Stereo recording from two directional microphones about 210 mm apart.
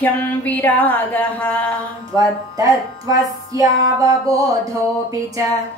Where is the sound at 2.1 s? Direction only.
15° right (ahead or behind).